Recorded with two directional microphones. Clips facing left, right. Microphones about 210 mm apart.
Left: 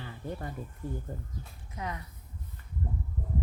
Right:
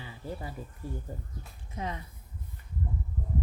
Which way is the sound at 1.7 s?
25° right (ahead or behind).